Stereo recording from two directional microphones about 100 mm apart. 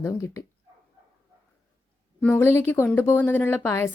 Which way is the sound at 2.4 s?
25° left (ahead or behind).